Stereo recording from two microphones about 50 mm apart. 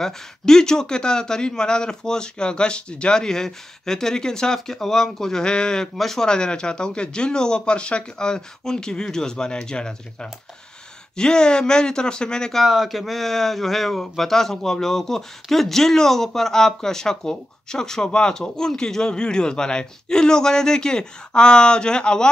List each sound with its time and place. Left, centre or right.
0.0 s speech: centre
12.6 s speech: centre